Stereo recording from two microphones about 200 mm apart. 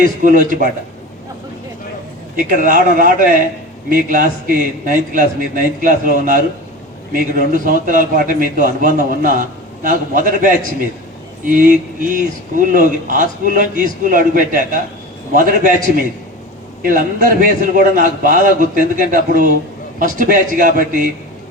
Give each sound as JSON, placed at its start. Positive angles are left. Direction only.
{"t": 0.0, "sound": "a man's voice", "side_deg": -40}
{"t": 2.6, "sound": "a man's voice", "side_deg": -45}